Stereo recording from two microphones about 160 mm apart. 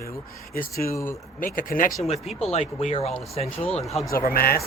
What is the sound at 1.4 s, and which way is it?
Speech, 60° left (ahead or behind).